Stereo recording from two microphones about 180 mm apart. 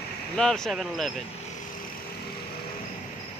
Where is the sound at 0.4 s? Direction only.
5° left (ahead or behind).